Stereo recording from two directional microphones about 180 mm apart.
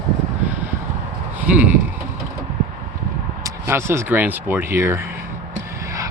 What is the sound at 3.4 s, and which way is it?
Speech, 15° right (ahead or behind).